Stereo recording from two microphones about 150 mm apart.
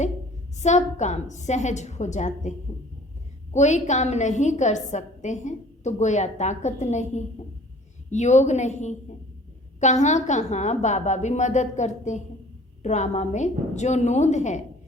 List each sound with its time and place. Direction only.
0.6 s a woman's voice: 50° left (ahead or behind)
3.5 s a woman's voice: 50° left (ahead or behind)